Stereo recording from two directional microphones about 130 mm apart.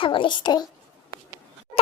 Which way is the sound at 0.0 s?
40° left (ahead or behind).